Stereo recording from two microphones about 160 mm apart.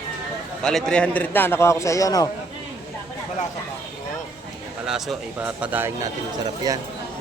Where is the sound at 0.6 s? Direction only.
5° left (ahead or behind); by 2.3 s 20° left (ahead or behind).